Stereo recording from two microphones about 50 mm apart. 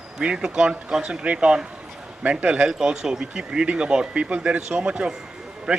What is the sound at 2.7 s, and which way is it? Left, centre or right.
A man's voice, centre.